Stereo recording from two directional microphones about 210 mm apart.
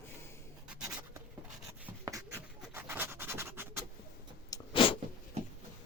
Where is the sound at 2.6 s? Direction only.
10° right (ahead or behind).